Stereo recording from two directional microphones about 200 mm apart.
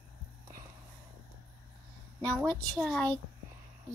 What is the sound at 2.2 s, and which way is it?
A woman's voice, centre (ahead or behind).